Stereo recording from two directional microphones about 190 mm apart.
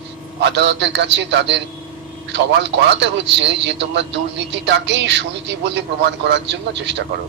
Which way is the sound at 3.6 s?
70° right (ahead or behind).